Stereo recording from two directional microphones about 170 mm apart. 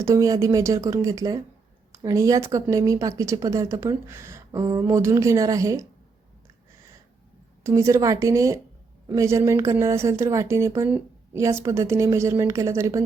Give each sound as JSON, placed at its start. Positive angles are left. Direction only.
{"t": 0.0, "sound": "speech", "side_deg": -20}
{"t": 7.6, "sound": "speech", "side_deg": -15}